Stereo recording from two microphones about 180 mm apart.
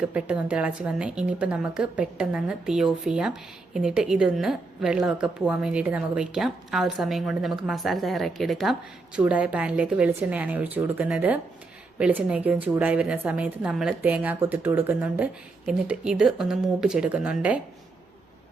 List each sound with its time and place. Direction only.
0.0 s a woman's voice: 5° right (ahead or behind)